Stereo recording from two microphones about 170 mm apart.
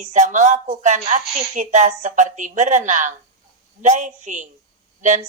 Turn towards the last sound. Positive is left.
turn(degrees=-45)  # may be behind; listen again after turning